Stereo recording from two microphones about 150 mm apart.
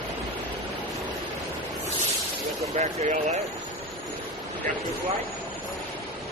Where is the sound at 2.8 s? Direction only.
50° right (ahead or behind).